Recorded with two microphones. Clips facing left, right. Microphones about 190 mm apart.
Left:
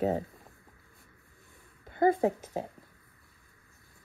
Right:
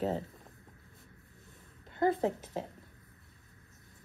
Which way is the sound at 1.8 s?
50° left (ahead or behind).